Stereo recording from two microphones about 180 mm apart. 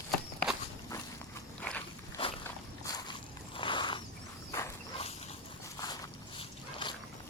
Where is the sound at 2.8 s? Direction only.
20° left (ahead or behind).